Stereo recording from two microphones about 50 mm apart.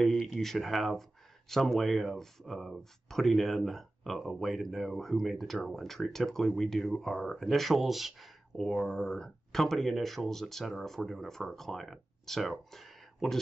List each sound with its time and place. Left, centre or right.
0.4 s speech: centre
8.6 s speech: centre